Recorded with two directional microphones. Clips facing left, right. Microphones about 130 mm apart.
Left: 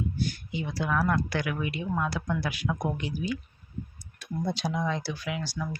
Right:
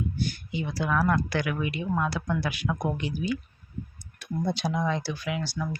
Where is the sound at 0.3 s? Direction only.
90° right.